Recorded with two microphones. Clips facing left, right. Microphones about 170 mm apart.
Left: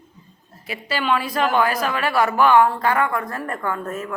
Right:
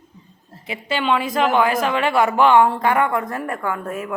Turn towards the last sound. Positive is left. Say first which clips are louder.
# right 1 dB
turn(degrees=-10)  # may be behind; listen again after turning